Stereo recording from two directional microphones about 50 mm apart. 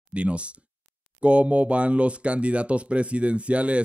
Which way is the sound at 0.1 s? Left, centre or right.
Right.